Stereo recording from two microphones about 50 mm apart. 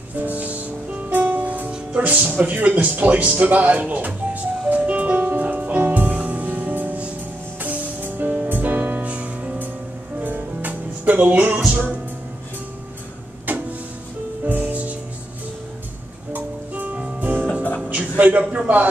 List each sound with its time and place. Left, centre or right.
0.2 s music: right
2.0 s speech: right
5.4 s music: right
9.0 s music: right
13.5 s music: right
16.3 s music: right
17.8 s a sound: right